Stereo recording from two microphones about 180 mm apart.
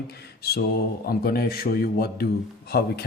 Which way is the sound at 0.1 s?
60° left (ahead or behind).